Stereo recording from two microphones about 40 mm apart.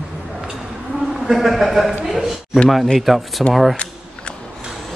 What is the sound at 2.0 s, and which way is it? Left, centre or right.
Speech, centre.